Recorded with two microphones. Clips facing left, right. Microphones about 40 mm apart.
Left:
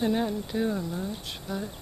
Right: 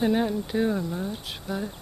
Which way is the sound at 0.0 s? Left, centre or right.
Centre.